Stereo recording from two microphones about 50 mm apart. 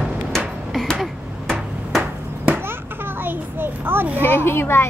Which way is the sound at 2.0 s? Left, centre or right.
Right.